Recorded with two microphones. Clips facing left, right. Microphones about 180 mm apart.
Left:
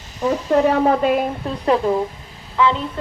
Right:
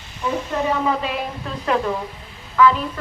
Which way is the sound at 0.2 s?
40° left (ahead or behind).